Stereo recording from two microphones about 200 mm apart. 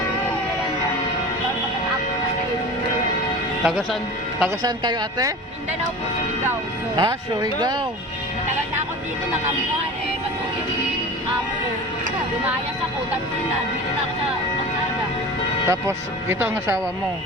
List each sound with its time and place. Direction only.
3.6 s speech: centre (ahead or behind)
4.4 s speech: 20° right (ahead or behind)
6.9 s speech: 20° right (ahead or behind)
15.6 s speech: 15° right (ahead or behind)